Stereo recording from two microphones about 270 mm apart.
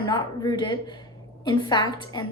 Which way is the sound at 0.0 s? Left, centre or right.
Centre.